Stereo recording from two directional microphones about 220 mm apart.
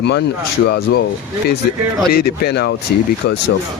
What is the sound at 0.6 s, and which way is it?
Speech, 50° left (ahead or behind).